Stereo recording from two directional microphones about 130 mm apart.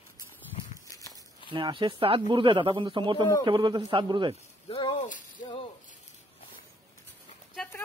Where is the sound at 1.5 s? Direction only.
40° right (ahead or behind).